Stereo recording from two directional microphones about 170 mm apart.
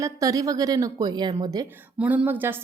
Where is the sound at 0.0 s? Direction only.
20° right (ahead or behind).